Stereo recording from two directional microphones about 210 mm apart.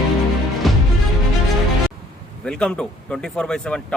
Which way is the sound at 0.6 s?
Centre (ahead or behind).